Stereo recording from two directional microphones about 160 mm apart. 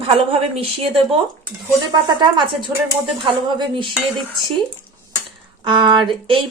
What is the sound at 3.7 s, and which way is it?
Speech, 35° right (ahead or behind).